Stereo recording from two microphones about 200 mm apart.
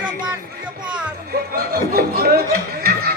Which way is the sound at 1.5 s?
50° right (ahead or behind).